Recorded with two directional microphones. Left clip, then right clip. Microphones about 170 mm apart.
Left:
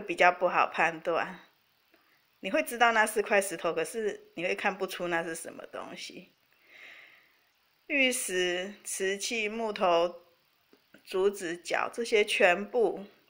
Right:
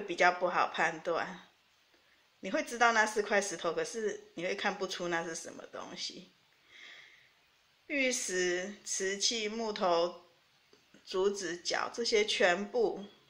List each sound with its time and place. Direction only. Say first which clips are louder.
0.2 s speech: left 4 dB; 30° left (ahead or behind)
2.4 s speech: left 3 dB; 30° left (ahead or behind)
6.7 s a sound: left 2 dB; 30° left (ahead or behind)
7.8 s speech: left 5 dB; 30° left (ahead or behind)